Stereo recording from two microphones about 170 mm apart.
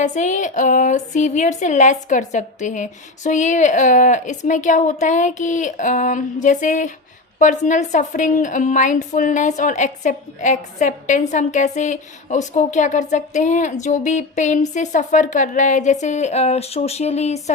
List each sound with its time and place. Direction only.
0.0 s a woman's voice: 45° left (ahead or behind)